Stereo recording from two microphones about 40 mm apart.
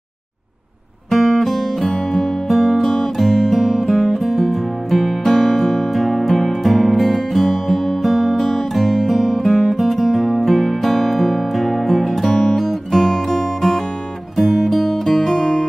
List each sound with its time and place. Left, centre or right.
1.1 s music: centre